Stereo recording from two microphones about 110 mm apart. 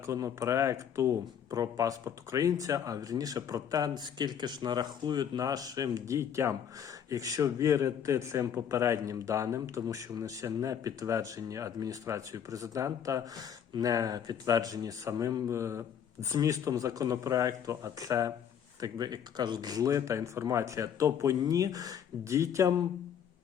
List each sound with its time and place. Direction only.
0.0 s a man's voice: 30° right (ahead or behind)